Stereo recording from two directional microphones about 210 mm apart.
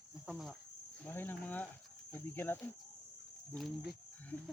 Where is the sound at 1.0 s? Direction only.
10° left (ahead or behind).